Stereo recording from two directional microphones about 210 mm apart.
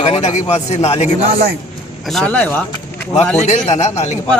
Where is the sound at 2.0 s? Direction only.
Centre (ahead or behind).